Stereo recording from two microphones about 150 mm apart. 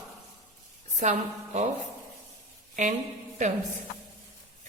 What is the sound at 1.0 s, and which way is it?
Speech, 50° right (ahead or behind).